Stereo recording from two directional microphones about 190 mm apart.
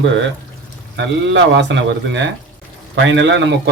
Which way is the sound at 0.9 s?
70° right (ahead or behind).